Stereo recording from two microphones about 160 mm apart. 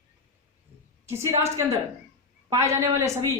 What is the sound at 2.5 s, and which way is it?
Speech, 20° right (ahead or behind).